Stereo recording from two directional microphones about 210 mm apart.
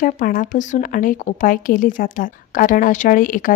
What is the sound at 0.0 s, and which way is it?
A woman's voice, 40° left (ahead or behind).